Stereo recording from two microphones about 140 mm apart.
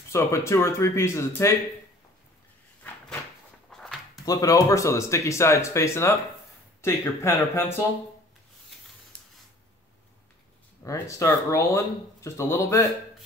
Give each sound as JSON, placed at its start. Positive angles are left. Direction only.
{"t": 0.1, "sound": "speech", "side_deg": 20}
{"t": 3.7, "sound": "a sound", "side_deg": 0}
{"t": 4.3, "sound": "speech", "side_deg": 25}
{"t": 10.8, "sound": "speech", "side_deg": 20}